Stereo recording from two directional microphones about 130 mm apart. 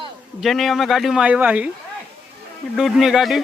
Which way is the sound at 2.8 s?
Centre (ahead or behind).